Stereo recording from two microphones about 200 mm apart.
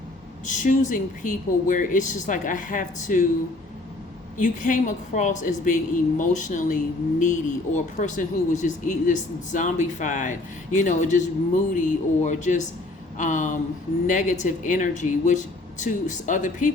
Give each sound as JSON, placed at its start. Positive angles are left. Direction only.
{"t": 0.4, "sound": "speech", "side_deg": 40}
{"t": 4.4, "sound": "speech", "side_deg": 40}